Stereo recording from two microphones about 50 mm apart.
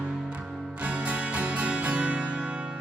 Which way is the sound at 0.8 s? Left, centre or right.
Right.